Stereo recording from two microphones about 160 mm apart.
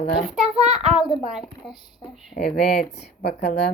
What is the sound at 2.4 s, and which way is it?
Speech, 75° left (ahead or behind).